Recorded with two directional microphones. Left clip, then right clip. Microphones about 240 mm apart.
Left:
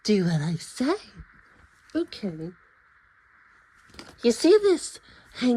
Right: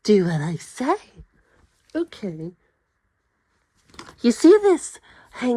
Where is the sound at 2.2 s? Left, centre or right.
Right.